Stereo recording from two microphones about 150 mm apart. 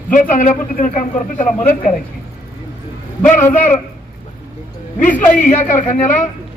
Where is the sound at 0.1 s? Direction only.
60° left (ahead or behind).